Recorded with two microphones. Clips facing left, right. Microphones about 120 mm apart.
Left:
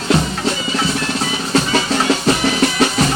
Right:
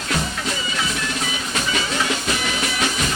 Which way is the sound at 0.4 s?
35° left (ahead or behind).